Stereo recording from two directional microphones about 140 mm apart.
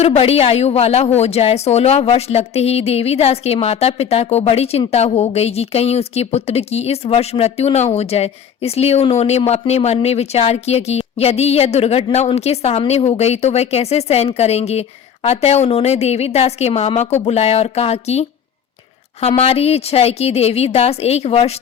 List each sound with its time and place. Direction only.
0.0 s a woman's voice: 45° left (ahead or behind)